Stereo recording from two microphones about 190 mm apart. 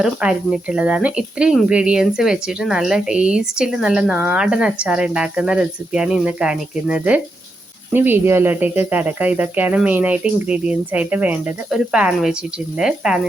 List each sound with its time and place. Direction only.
0.0 s speech: 5° right (ahead or behind)